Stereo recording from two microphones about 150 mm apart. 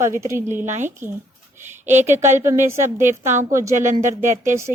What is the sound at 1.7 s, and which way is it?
Speech, 50° right (ahead or behind).